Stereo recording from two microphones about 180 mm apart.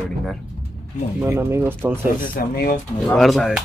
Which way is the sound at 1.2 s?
10° right (ahead or behind).